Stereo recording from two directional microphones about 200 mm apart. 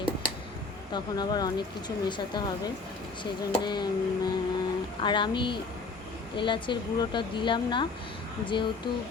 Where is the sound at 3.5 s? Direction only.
20° left (ahead or behind).